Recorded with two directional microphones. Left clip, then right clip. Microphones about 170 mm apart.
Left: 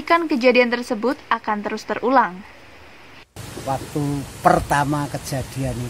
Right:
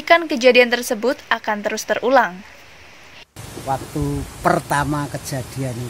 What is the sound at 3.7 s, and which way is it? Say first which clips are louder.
Speech: right 1 dB; centre (ahead or behind).